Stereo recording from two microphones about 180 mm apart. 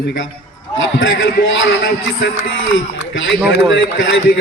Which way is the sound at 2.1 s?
80° left.